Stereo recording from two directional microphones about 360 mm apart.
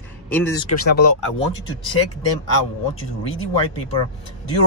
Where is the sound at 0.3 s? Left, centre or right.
Centre.